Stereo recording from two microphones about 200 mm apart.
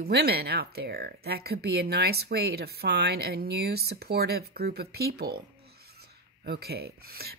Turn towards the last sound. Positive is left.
turn(degrees=-50)  # may be behind; listen again after turning